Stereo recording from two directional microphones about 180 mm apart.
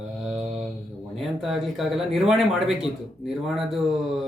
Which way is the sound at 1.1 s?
Centre (ahead or behind).